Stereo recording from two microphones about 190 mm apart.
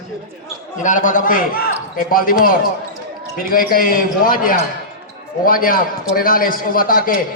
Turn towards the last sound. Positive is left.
turn(degrees=50)  # may be behind; listen again after turning